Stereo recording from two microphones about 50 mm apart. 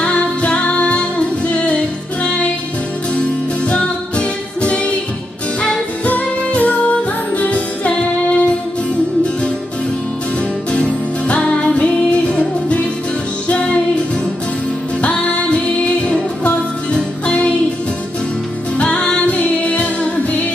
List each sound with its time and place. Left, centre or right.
0.0 s music: left
3.6 s music: left
6.0 s music: left
10.7 s music: left
15.0 s music: left
18.8 s music: left